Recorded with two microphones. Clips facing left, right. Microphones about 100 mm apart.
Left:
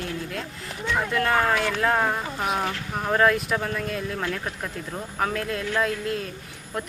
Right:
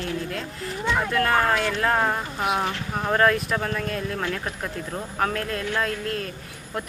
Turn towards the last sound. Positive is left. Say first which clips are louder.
# even
turn(degrees=0)  # may be behind; listen again after turning